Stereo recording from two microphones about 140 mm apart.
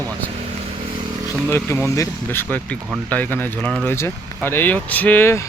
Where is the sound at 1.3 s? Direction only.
15° left (ahead or behind).